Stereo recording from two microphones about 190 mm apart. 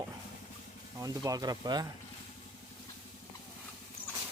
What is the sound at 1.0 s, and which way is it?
Speech, 20° right (ahead or behind).